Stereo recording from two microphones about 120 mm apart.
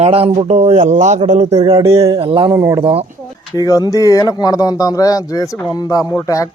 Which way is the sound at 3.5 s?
30° left (ahead or behind).